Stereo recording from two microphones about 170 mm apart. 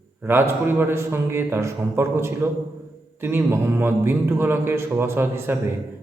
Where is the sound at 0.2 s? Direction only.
15° right (ahead or behind).